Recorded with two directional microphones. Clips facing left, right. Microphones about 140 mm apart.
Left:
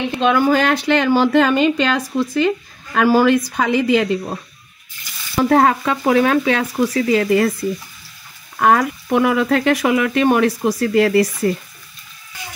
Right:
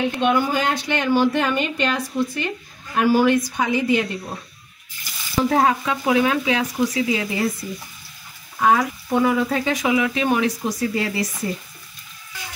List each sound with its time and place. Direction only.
0.1 s a woman's voice: 90° left
5.4 s speech: 60° left (ahead or behind)
8.5 s speech: 65° left (ahead or behind)